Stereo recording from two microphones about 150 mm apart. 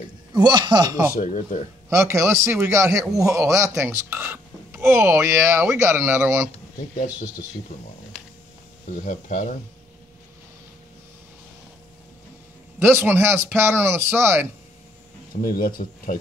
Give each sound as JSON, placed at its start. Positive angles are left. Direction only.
{"t": 0.3, "sound": "a man's voice", "side_deg": -30}
{"t": 1.2, "sound": "speech", "side_deg": 60}
{"t": 1.9, "sound": "a man's voice", "side_deg": -20}
{"t": 7.7, "sound": "speech", "side_deg": 50}
{"t": 9.0, "sound": "speech", "side_deg": 60}
{"t": 12.7, "sound": "speech", "side_deg": -15}
{"t": 15.4, "sound": "speech", "side_deg": 75}